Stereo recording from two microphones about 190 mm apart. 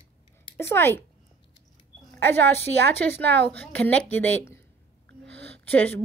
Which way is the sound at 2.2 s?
10° left (ahead or behind).